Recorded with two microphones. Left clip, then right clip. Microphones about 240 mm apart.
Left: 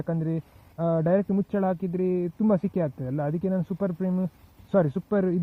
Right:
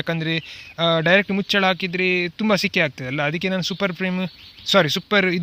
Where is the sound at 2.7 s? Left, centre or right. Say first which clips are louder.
Right 8 dB; right.